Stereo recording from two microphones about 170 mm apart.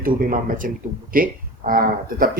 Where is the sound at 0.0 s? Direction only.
55° right (ahead or behind).